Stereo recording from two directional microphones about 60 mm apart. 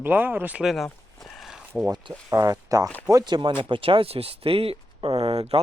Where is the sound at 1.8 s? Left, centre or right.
Right.